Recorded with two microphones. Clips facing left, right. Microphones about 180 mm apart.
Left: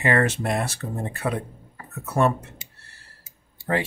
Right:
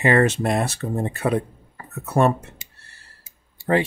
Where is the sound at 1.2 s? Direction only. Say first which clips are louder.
Right 5 dB; 35° right (ahead or behind).